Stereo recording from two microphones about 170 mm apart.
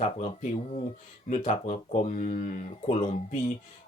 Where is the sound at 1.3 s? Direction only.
45° left (ahead or behind).